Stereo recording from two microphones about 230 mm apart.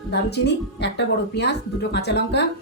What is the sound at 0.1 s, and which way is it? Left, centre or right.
A woman's voice, left.